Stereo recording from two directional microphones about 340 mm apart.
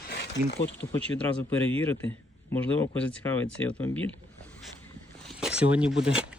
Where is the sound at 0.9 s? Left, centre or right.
Centre.